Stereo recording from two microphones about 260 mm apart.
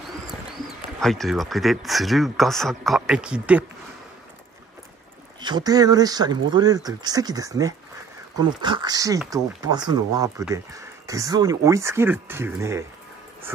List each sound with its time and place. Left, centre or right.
1.0 s speech: centre
5.4 s speech: centre